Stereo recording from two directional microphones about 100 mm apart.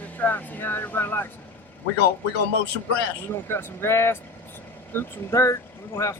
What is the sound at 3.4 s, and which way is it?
Speech, 25° left (ahead or behind).